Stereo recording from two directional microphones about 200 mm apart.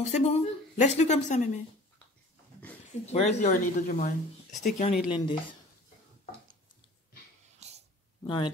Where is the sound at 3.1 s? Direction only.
35° left (ahead or behind).